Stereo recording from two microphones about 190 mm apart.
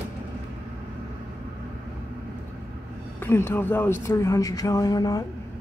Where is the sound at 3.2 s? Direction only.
10° left (ahead or behind).